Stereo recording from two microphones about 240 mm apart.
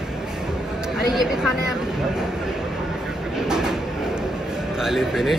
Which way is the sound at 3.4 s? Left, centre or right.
Centre.